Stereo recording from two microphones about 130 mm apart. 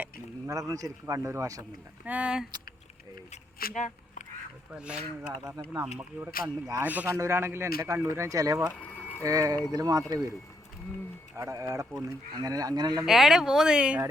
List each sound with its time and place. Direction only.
0.0 s speech: 20° right (ahead or behind)
2.0 s speech: 10° right (ahead or behind)
3.8 s speech: 70° left (ahead or behind)
4.7 s speech: 10° right (ahead or behind)
5.6 s speech: 30° right (ahead or behind)
6.0 s speech: 15° right (ahead or behind)
6.4 s speech: 25° right (ahead or behind)
6.8 s speech: 15° right (ahead or behind)
8.7 s boiling: 15° left (ahead or behind)
9.2 s speech: 25° right (ahead or behind)
11.3 s speech: 25° right (ahead or behind)
13.1 s speech: centre (ahead or behind)